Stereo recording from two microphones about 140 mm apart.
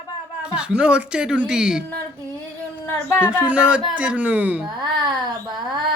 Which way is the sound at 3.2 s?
10° right (ahead or behind).